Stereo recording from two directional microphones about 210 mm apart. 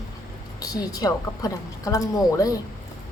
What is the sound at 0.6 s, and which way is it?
A woman's voice, 15° left (ahead or behind).